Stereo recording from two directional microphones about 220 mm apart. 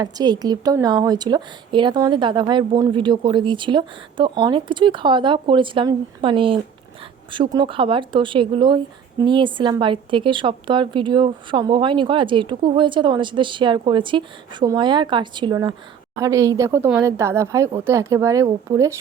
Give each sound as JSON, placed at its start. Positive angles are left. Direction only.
{"t": 0.0, "sound": "a woman's voice", "side_deg": -15}